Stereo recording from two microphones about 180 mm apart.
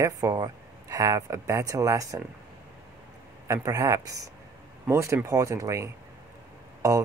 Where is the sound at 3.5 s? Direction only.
15° right (ahead or behind).